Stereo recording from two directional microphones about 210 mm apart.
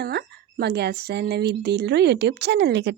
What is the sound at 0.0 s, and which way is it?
Speech, 50° right (ahead or behind).